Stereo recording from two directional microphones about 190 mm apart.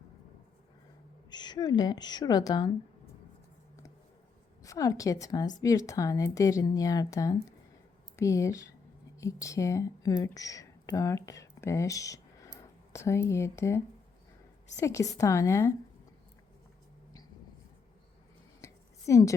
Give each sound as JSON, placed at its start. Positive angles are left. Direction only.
{"t": 1.3, "sound": "a woman's voice", "side_deg": 20}
{"t": 4.6, "sound": "speech", "side_deg": 15}
{"t": 18.6, "sound": "a sound", "side_deg": 15}